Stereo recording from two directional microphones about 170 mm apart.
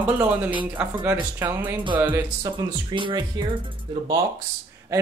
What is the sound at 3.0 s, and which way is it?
Speech, 25° right (ahead or behind).